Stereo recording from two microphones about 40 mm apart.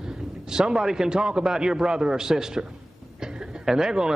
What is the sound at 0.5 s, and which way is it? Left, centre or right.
Speech, centre.